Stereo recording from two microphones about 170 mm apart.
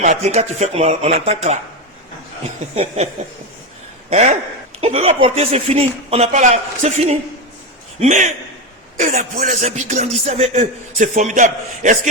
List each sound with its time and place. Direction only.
0.0 s speech: 45° right (ahead or behind)
2.7 s speech: 35° right (ahead or behind)
4.1 s speech: 40° right (ahead or behind)